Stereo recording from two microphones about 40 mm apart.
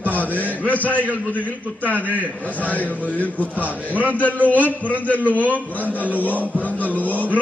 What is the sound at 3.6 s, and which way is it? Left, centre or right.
A man's voice, right.